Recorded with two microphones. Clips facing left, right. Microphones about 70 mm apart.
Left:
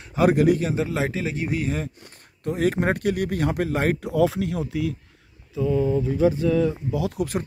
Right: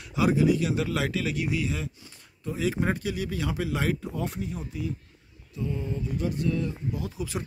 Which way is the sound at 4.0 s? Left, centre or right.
Left.